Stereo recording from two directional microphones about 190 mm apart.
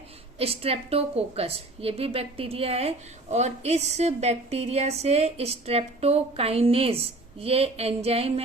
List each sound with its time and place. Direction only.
0.3 s a woman's voice: 30° right (ahead or behind)